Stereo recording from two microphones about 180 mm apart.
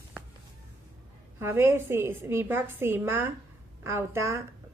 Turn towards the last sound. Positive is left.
turn(degrees=-15)  # may be behind; listen again after turning